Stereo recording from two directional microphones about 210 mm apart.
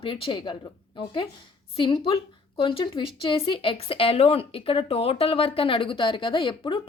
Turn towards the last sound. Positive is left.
turn(degrees=25)  # may be behind; listen again after turning